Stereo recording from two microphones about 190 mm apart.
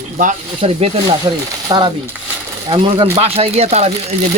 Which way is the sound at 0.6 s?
30° right (ahead or behind).